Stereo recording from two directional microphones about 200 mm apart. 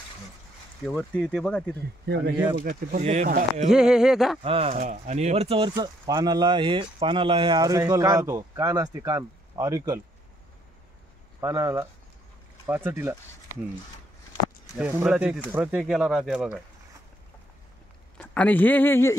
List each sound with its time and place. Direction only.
0.8 s speech: centre (ahead or behind)
2.1 s speech: 55° right (ahead or behind)
2.6 s speech: 40° right (ahead or behind)
3.7 s speech: 5° right (ahead or behind)
4.4 s speech: 30° right (ahead or behind)
11.4 s speech: 15° right (ahead or behind)
14.8 s speech: 5° right (ahead or behind)
18.1 s speech: 5° left (ahead or behind)